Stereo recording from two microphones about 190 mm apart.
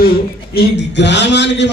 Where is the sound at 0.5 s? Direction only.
65° left (ahead or behind).